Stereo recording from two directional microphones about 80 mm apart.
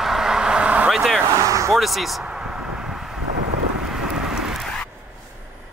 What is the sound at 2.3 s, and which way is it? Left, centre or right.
Vehicle, centre.